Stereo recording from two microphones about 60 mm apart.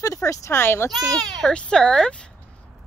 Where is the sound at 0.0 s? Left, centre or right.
Left.